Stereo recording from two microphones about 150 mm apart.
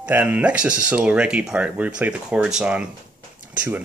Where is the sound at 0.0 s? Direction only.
10° right (ahead or behind).